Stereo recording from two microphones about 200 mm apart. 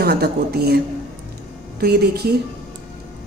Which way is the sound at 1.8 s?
55° right (ahead or behind).